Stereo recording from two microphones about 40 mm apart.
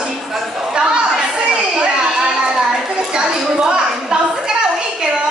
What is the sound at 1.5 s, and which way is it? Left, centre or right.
Children playing, right.